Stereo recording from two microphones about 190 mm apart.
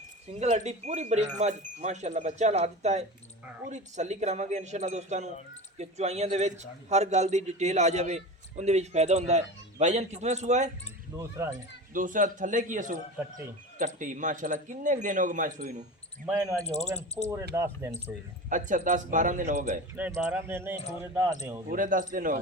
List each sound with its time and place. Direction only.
0.3 s a man's voice: 35° right (ahead or behind)
11.2 s speech: 15° right (ahead or behind)
11.9 s speech: 45° right (ahead or behind)
13.2 s speech: 10° right (ahead or behind)
13.7 s speech: 45° right (ahead or behind)
16.3 s speech: 15° right (ahead or behind)
16.8 s speech: 35° left (ahead or behind)
17.5 s speech: 15° right (ahead or behind)
18.4 s speech: 40° right (ahead or behind)
20.0 s speech: 5° right (ahead or behind)
21.7 s speech: 45° right (ahead or behind)